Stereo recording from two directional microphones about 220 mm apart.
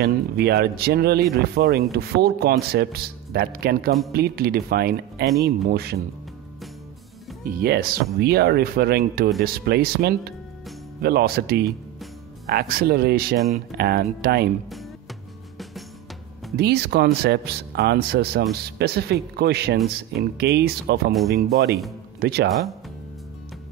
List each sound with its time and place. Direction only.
0.0 s speech: 45° right (ahead or behind)
7.4 s speech: 45° right (ahead or behind)
16.5 s speech: 50° right (ahead or behind)
22.2 s speech: 45° right (ahead or behind)